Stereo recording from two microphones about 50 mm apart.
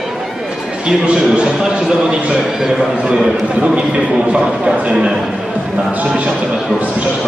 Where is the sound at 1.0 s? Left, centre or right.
Centre.